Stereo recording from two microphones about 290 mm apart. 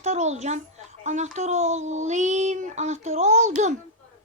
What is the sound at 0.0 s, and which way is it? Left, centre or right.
A child's voice, right.